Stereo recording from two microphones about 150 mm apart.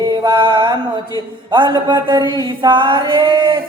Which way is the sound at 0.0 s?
30° right (ahead or behind).